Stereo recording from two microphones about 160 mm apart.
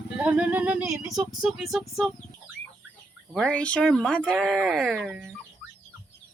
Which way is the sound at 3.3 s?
5° left (ahead or behind).